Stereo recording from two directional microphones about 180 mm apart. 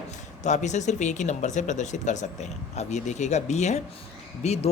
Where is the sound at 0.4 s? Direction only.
40° left (ahead or behind).